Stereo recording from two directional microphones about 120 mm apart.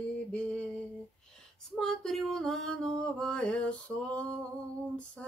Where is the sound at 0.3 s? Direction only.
10° left (ahead or behind).